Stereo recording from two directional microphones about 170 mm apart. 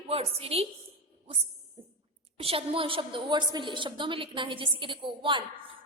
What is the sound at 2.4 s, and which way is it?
A woman's voice, 35° right (ahead or behind).